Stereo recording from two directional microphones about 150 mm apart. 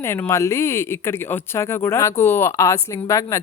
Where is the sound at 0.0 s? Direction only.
15° left (ahead or behind).